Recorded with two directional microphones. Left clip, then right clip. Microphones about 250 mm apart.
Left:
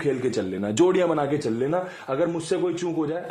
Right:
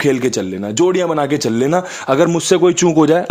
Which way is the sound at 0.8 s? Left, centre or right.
Right.